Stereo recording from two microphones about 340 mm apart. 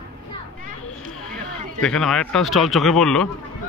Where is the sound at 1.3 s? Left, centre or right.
Centre.